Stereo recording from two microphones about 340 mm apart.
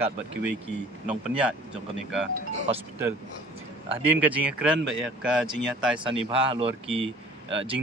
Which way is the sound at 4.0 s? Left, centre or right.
Centre.